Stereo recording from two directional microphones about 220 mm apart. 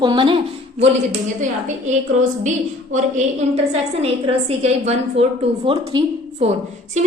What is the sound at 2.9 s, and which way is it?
A woman's voice, 30° right (ahead or behind).